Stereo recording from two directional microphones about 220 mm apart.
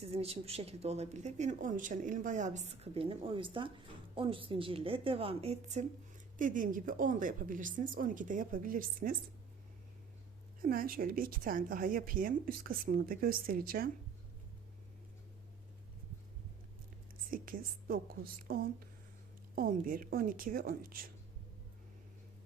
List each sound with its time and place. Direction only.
0.0 s a woman's voice: 25° right (ahead or behind)
10.6 s a woman's voice: 40° right (ahead or behind)
17.3 s a woman's voice: 40° right (ahead or behind)